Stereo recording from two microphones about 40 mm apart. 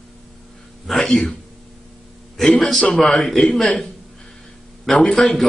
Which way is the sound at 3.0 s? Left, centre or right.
Centre.